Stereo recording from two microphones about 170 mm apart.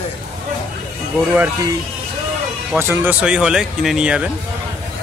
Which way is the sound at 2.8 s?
15° right (ahead or behind).